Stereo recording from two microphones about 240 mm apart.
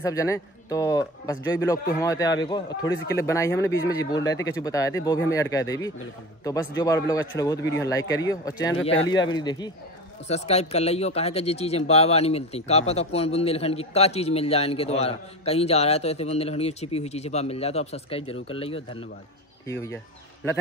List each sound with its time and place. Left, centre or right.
0.0 s a man's voice: centre
19.6 s speech: centre